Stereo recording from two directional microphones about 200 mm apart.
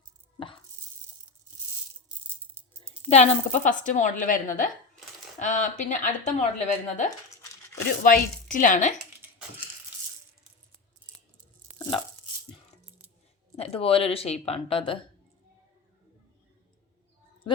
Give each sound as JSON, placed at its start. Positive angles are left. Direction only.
{"t": 0.3, "sound": "a sound", "side_deg": 25}
{"t": 2.4, "sound": "rattle", "side_deg": -10}
{"t": 3.1, "sound": "speech", "side_deg": 35}
{"t": 8.0, "sound": "chopping", "side_deg": 45}
{"t": 8.5, "sound": "speech", "side_deg": 40}
{"t": 11.7, "sound": "tearing", "side_deg": -35}
{"t": 13.6, "sound": "speech", "side_deg": 30}